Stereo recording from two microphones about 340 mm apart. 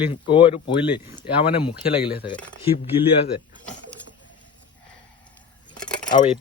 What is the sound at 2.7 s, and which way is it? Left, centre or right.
Speech, left.